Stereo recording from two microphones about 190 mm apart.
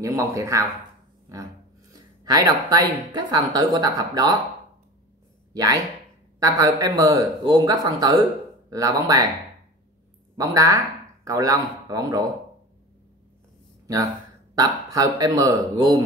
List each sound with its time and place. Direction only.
0.0 s speech: 15° right (ahead or behind)
2.2 s speech: 20° right (ahead or behind)
5.5 s speech: 20° right (ahead or behind)
10.3 s speech: 15° right (ahead or behind)
14.5 s speech: 20° right (ahead or behind)